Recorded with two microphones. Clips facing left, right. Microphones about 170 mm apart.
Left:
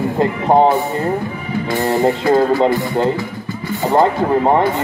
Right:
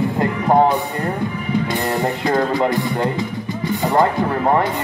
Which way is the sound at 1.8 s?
20° left (ahead or behind).